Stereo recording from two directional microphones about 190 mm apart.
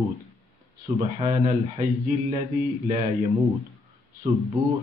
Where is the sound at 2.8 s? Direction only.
30° right (ahead or behind).